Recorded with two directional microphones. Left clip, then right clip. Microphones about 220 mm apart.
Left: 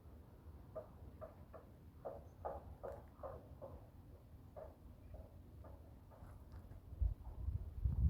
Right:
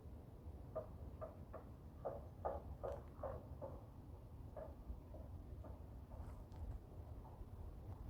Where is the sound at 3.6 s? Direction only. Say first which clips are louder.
Right 2 dB; 40° left (ahead or behind).